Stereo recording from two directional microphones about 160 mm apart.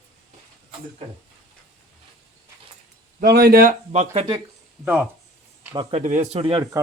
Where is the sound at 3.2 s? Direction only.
75° right (ahead or behind).